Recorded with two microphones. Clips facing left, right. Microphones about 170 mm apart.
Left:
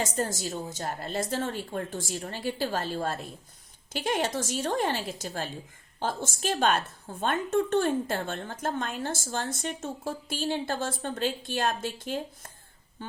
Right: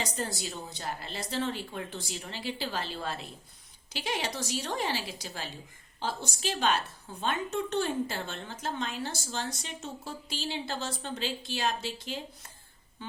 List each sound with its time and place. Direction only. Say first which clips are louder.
0.0 s a woman's voice: left 5 dB; 45° left (ahead or behind)